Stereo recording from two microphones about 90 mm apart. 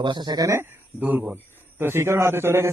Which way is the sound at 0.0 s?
55° right (ahead or behind).